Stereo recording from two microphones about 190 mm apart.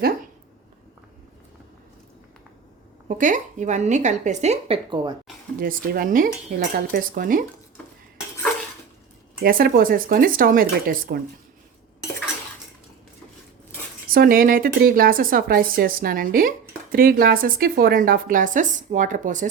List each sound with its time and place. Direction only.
3.2 s a woman's voice: 40° right (ahead or behind)
5.5 s speech: 50° right (ahead or behind)
9.4 s speech: 50° right (ahead or behind)
14.1 s speech: 50° right (ahead or behind)